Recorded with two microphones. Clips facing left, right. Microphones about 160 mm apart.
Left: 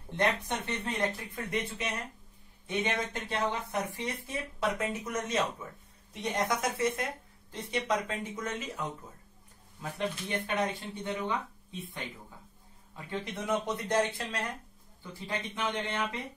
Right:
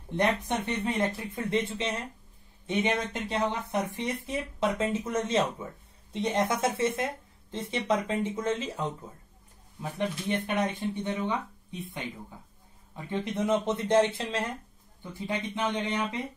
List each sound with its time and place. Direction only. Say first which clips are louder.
0.1 s speech: right 3 dB; 20° right (ahead or behind)
9.8 s speech: right 3 dB; 20° right (ahead or behind)
12.9 s speech: right 6 dB; 20° right (ahead or behind)